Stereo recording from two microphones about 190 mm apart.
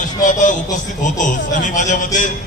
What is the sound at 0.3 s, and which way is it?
A man's voice, 45° left (ahead or behind).